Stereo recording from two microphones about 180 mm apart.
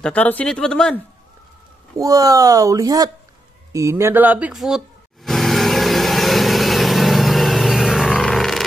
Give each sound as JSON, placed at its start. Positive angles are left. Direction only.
{"t": 0.0, "sound": "speech", "side_deg": 10}
{"t": 2.0, "sound": "speech", "side_deg": -20}
{"t": 3.7, "sound": "vehicle", "side_deg": -15}